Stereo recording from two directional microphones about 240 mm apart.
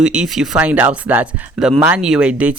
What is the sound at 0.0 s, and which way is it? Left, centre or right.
Speech, centre.